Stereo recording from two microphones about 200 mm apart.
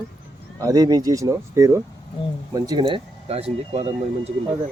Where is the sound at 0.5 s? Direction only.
15° right (ahead or behind).